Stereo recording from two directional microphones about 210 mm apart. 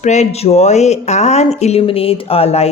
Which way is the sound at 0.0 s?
35° left (ahead or behind).